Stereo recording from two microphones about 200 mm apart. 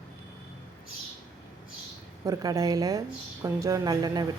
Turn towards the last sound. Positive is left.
turn(degrees=-20)  # may be behind; listen again after turning